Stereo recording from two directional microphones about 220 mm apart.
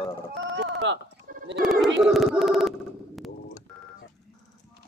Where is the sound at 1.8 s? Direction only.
Centre (ahead or behind).